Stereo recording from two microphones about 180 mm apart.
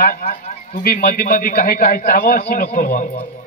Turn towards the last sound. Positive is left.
turn(degrees=50)  # may be behind; listen again after turning